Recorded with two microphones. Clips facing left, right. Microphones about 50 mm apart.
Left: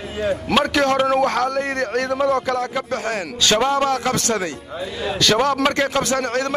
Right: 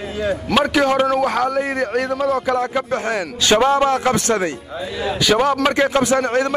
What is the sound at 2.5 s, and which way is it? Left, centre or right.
A man's voice, right.